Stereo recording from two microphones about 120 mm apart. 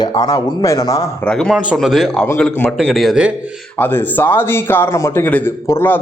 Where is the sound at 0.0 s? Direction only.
35° left (ahead or behind).